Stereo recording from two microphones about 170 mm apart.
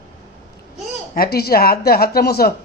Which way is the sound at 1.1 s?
65° left (ahead or behind).